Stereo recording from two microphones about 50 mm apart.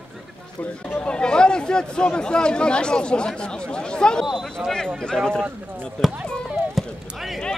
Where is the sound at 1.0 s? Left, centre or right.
Centre.